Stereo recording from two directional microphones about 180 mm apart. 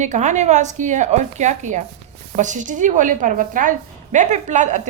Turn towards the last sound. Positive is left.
turn(degrees=-40)  # may be behind; listen again after turning